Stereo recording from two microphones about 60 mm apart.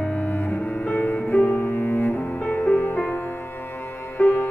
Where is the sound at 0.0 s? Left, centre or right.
Left.